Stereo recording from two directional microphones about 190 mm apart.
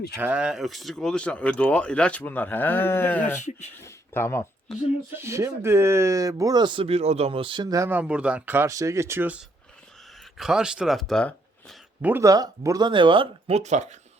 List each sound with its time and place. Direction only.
0.2 s speech: 5° right (ahead or behind); by 3.4 s 10° left (ahead or behind)
3.8 s a sound: 15° left (ahead or behind)
5.1 s speech: 15° right (ahead or behind); by 11.3 s 5° left (ahead or behind)
12.0 s speech: 15° right (ahead or behind); by 13.9 s 35° right (ahead or behind)